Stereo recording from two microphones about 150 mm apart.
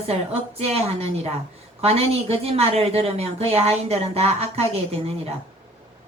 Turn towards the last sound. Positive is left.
turn(degrees=-45)  # may be behind; listen again after turning